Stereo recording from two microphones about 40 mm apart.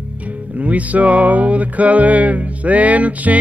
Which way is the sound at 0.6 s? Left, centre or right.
Right.